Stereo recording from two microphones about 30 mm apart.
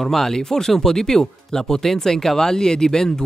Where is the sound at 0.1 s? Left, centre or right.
Centre.